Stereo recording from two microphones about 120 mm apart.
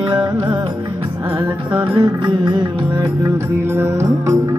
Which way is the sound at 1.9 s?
40° right (ahead or behind).